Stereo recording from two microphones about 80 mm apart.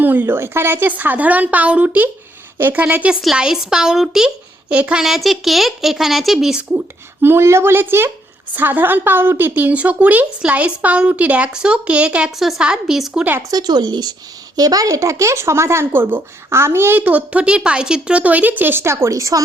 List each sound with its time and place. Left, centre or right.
0.0 s speech: right
2.8 s speech: centre
6.6 s speech: right; by 13.2 s centre
13.5 s speech: right